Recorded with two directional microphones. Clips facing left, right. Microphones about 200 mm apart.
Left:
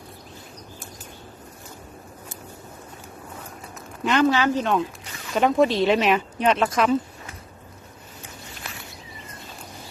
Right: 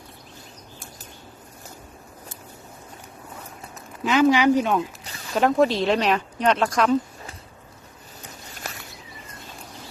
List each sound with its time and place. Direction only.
4.0 s speech: 5° right (ahead or behind)
4.3 s speech: 15° right (ahead or behind); by 6.9 s 5° left (ahead or behind)
8.5 s a sound: 45° right (ahead or behind)